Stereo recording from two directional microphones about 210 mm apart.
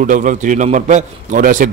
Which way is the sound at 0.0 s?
40° right (ahead or behind).